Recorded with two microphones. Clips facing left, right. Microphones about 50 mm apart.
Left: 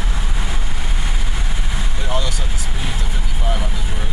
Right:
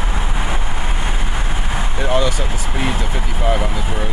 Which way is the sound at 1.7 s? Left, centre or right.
Right.